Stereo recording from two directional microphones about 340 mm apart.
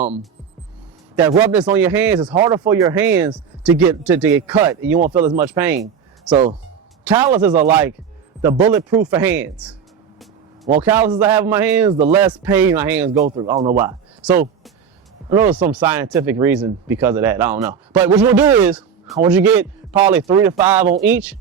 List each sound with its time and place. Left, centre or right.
1.1 s speech: centre
5.8 s a sound: centre
7.0 s speech: centre
13.1 s speech: centre